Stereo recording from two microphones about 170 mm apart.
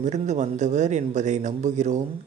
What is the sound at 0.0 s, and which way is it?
A man's voice, 45° right (ahead or behind).